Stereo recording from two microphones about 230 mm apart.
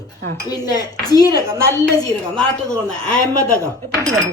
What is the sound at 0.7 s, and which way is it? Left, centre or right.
Speech, centre.